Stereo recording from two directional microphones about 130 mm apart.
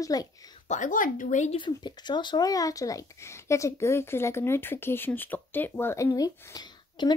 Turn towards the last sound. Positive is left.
turn(degrees=30)  # may be behind; listen again after turning